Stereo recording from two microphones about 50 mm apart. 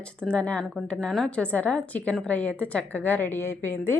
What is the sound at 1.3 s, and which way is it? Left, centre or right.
A woman's voice, left.